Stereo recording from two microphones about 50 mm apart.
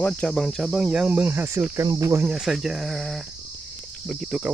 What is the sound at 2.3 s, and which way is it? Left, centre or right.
Speech, centre.